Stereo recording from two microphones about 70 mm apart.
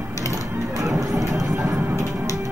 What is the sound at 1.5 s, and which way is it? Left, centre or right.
Music, right.